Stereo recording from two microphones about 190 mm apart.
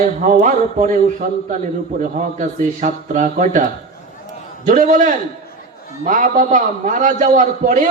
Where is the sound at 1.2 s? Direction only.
45° right (ahead or behind).